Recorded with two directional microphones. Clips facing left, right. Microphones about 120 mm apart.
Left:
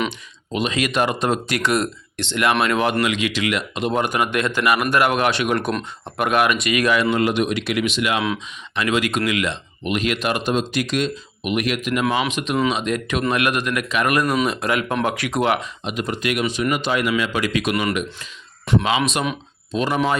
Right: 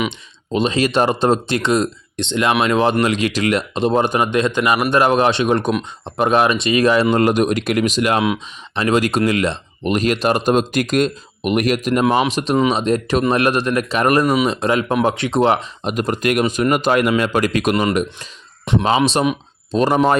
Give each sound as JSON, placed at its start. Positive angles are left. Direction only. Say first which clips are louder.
{"t": 0.1, "sound": "speech", "louder": "right 5 dB", "side_deg": -30}
{"t": 3.0, "sound": "speech", "louder": "right 4 dB", "side_deg": -40}
{"t": 18.6, "sound": "speech", "louder": "right 1 dB", "side_deg": -20}
{"t": 18.9, "sound": "speech", "louder": "right 5 dB", "side_deg": -35}